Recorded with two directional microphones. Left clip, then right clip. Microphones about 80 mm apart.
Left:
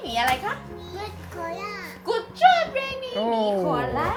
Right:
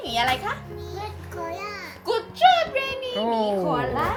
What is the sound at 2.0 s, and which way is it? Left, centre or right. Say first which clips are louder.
A child's voice: even; centre.